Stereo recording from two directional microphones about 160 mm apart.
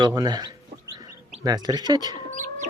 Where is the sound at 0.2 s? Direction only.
25° right (ahead or behind).